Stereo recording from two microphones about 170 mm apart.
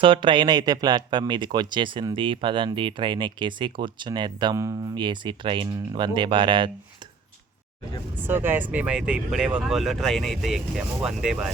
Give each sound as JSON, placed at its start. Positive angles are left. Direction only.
{"t": 0.0, "sound": "speech", "side_deg": -30}
{"t": 8.2, "sound": "speech", "side_deg": -10}